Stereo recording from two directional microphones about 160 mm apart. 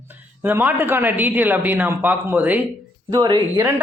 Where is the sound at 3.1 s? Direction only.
25° right (ahead or behind).